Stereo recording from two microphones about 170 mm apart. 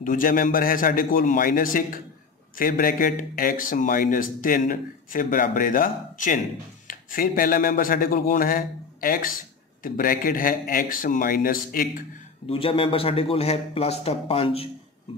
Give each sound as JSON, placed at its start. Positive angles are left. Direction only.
{"t": 0.0, "sound": "a man's voice", "side_deg": 55}
{"t": 12.4, "sound": "a man's voice", "side_deg": 35}